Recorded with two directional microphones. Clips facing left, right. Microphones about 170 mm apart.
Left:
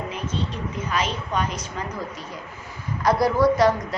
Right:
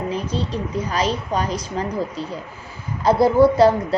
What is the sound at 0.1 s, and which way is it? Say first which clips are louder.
A woman's voice: right 5 dB; 35° right (ahead or behind).